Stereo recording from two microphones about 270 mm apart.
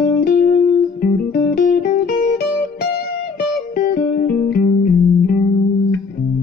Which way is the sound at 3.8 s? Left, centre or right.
Left.